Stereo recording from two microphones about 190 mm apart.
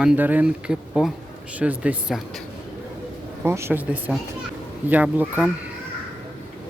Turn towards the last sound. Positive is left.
turn(degrees=-10)  # may be behind; listen again after turning